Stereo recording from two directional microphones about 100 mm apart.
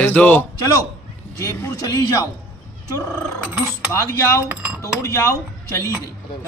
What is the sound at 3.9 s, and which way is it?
Speech, 25° left (ahead or behind).